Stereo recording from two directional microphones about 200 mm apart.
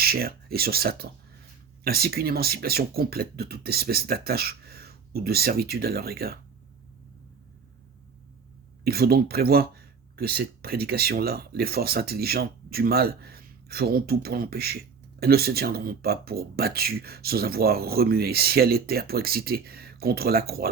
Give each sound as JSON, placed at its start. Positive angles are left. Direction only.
{"t": 0.0, "sound": "speech", "side_deg": -50}
{"t": 8.8, "sound": "speech", "side_deg": -50}